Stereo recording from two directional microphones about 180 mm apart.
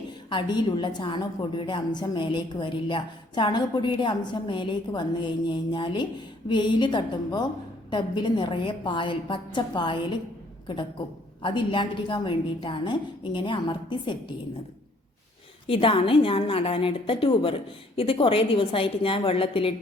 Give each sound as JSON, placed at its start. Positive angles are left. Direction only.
{"t": 0.3, "sound": "a woman's voice", "side_deg": 25}
{"t": 11.4, "sound": "a woman's voice", "side_deg": 25}
{"t": 15.6, "sound": "a woman's voice", "side_deg": 30}